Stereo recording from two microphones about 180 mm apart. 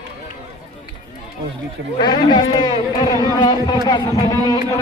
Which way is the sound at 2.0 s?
25° left (ahead or behind).